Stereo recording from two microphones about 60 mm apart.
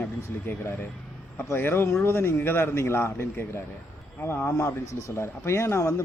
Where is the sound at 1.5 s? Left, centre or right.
Left.